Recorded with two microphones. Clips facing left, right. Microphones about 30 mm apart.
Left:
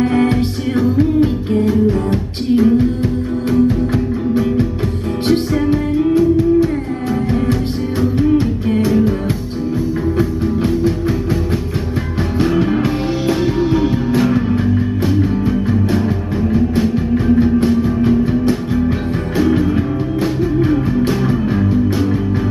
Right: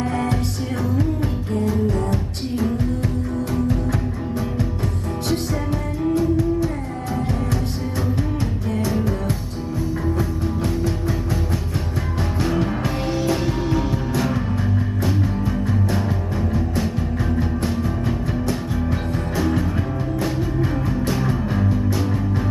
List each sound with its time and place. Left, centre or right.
0.0 s music: left
5.7 s music: left
8.8 s music: left
10.1 s music: left
12.4 s music: left